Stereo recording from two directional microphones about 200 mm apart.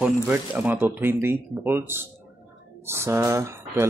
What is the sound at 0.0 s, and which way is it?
Speech, 5° right (ahead or behind).